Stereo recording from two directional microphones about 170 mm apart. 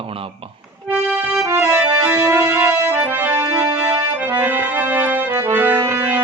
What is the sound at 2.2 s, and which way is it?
Music, 20° right (ahead or behind).